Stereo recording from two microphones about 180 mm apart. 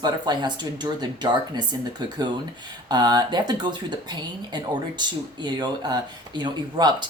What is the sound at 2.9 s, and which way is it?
Speech, 25° right (ahead or behind).